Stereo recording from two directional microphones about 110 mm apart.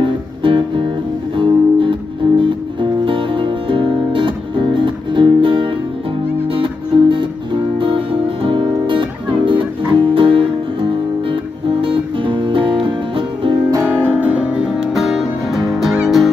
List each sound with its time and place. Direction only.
0.0 s music: 50° right (ahead or behind)
14.0 s music: 10° right (ahead or behind)